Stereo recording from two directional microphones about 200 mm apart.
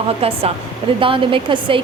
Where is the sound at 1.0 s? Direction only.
25° right (ahead or behind).